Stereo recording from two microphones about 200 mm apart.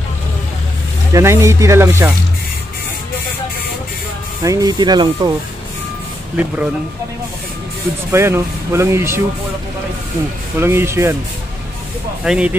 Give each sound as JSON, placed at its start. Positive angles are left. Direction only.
{"t": 1.1, "sound": "speech", "side_deg": -15}
{"t": 4.4, "sound": "speech", "side_deg": -15}
{"t": 8.1, "sound": "speech", "side_deg": -15}
{"t": 10.6, "sound": "speech", "side_deg": -10}
{"t": 12.3, "sound": "speech", "side_deg": -5}